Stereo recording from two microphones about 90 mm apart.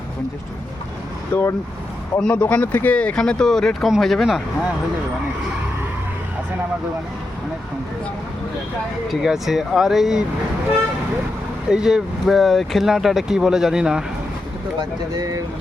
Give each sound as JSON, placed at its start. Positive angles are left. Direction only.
{"t": 1.3, "sound": "speech", "side_deg": 20}
{"t": 9.0, "sound": "speech", "side_deg": -5}
{"t": 11.7, "sound": "speech", "side_deg": -5}
{"t": 15.1, "sound": "speech", "side_deg": -45}